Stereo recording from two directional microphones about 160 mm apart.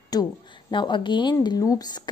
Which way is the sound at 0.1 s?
30° left (ahead or behind).